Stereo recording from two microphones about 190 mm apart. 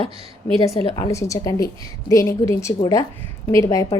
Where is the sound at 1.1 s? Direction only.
15° left (ahead or behind).